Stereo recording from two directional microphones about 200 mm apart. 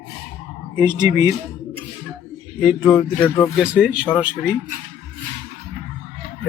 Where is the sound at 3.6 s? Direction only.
5° right (ahead or behind).